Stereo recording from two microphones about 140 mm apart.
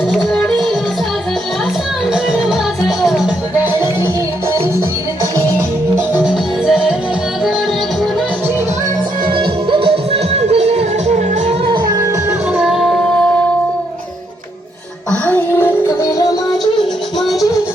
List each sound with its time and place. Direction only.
0.1 s music: centre (ahead or behind)
2.1 s music: 5° right (ahead or behind)
3.6 s music: 15° right (ahead or behind)
6.1 s music: 5° right (ahead or behind)
9.3 s music: 35° right (ahead or behind)
11.9 s music: 20° right (ahead or behind)
12.5 s music: 5° right (ahead or behind)
15.3 s music: 15° left (ahead or behind)